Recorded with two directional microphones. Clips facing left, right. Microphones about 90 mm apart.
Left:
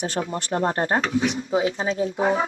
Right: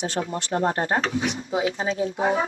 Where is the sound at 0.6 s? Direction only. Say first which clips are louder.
Left 1 dB; 35° left (ahead or behind).